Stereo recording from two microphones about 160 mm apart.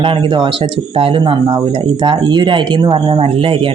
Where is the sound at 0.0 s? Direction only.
35° right (ahead or behind).